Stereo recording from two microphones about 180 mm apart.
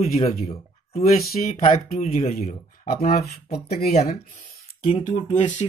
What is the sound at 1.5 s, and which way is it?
Speech, 35° left (ahead or behind).